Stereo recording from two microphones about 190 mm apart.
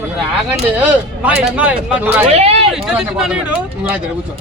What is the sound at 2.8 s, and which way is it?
Speech, 5° right (ahead or behind).